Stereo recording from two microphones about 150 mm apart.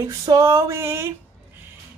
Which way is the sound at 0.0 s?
20° right (ahead or behind).